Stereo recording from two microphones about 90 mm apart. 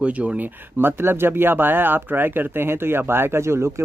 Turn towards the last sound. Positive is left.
turn(degrees=-30)  # may be behind; listen again after turning